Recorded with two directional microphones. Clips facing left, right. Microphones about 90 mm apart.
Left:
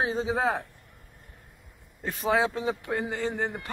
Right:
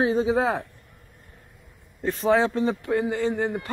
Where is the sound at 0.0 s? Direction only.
20° left (ahead or behind).